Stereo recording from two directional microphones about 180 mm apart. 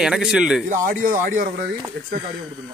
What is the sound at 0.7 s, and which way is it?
Speech, 50° right (ahead or behind).